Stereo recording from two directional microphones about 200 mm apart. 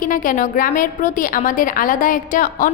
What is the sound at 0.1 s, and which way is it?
A woman's voice, 40° left (ahead or behind).